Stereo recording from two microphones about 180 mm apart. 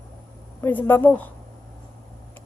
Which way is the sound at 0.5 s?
10° left (ahead or behind).